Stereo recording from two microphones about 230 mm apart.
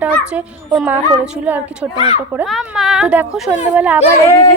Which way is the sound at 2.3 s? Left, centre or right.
Centre.